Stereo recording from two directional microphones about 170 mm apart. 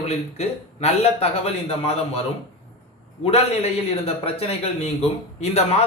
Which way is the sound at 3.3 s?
35° left (ahead or behind).